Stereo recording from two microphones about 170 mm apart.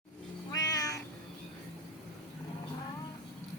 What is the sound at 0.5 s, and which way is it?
Cat, 20° left (ahead or behind).